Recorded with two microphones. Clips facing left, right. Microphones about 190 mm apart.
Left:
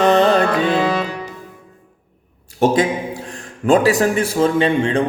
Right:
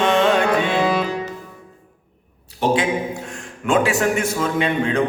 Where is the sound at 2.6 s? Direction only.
45° left (ahead or behind).